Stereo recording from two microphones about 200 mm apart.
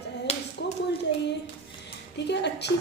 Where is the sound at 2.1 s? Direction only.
60° left (ahead or behind).